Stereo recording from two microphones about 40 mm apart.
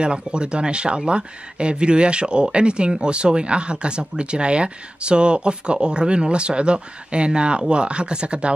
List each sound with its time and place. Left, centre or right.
0.0 s speech: right